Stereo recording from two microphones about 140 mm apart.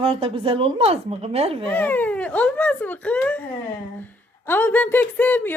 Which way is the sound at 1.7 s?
10° left (ahead or behind).